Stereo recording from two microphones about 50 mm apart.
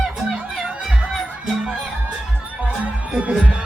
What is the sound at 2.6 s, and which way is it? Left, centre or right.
Music, right.